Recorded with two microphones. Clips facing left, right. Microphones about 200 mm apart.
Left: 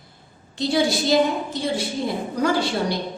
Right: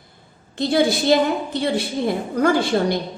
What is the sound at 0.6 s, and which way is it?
A woman's voice, 55° right (ahead or behind).